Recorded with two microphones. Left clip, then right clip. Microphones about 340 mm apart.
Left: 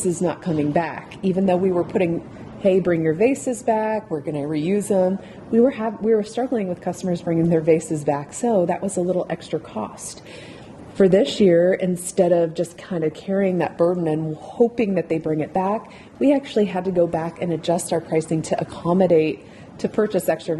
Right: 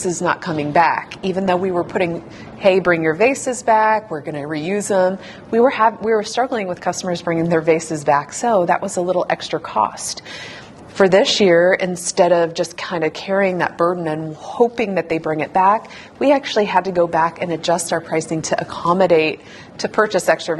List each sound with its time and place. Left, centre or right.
0.2 s a woman's voice: right
2.6 s a woman's voice: right
10.9 s a woman's voice: right